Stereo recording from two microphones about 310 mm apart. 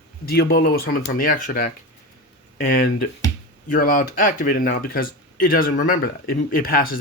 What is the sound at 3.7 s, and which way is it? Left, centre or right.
Speech, left.